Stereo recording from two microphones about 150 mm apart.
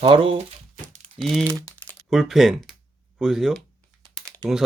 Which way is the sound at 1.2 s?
Centre (ahead or behind).